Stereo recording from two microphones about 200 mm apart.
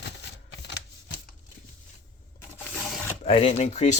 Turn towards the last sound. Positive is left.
turn(degrees=35)  # may be behind; listen again after turning